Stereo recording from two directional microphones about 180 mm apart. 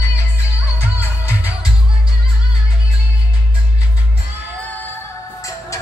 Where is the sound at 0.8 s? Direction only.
10° right (ahead or behind).